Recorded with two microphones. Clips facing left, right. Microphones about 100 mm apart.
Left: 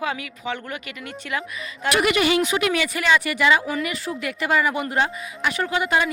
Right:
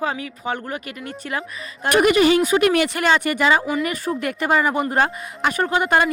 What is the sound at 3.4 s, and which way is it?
Speech, 35° right (ahead or behind).